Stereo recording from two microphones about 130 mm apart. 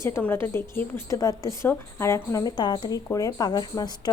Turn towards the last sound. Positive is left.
turn(degrees=30)  # may be behind; listen again after turning